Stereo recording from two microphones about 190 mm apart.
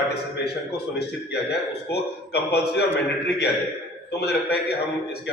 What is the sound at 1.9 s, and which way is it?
Speech, 60° left (ahead or behind).